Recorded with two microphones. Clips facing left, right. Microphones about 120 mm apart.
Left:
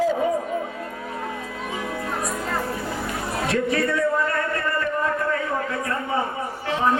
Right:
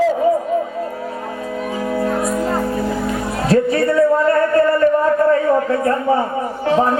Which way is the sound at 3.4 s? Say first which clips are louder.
Right 8 dB; 35° right (ahead or behind).